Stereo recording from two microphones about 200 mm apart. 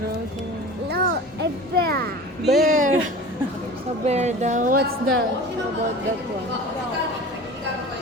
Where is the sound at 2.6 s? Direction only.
40° right (ahead or behind).